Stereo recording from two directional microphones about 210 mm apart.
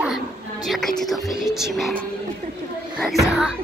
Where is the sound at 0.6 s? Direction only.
Centre (ahead or behind).